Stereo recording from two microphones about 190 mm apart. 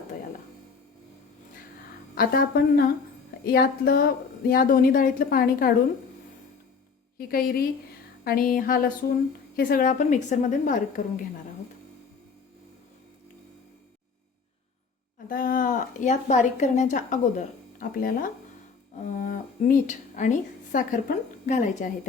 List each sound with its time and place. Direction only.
2.1 s a woman's voice: 55° left (ahead or behind)
7.2 s a woman's voice: 50° left (ahead or behind)
15.3 s a woman's voice: 50° left (ahead or behind)